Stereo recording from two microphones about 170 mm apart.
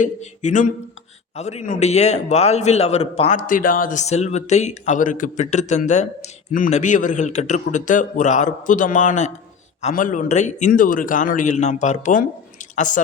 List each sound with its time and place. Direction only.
0.0 s a man's voice: 45° left (ahead or behind)